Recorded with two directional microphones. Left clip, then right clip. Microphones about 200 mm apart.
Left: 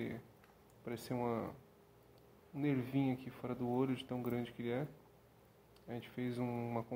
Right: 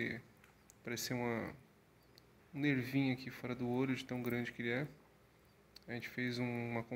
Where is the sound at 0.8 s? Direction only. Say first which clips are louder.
Even; 5° right (ahead or behind).